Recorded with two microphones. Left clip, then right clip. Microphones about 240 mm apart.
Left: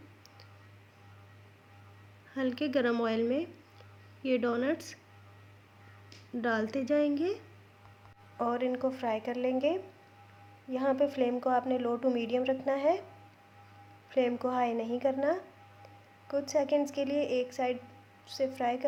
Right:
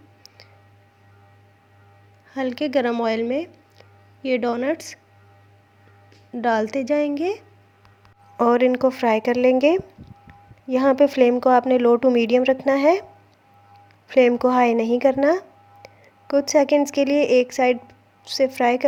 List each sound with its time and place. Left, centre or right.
2.3 s speech: right
6.3 s a woman's voice: right
14.1 s speech: right